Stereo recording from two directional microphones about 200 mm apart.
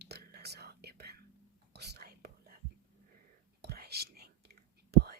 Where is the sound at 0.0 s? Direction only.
55° right (ahead or behind).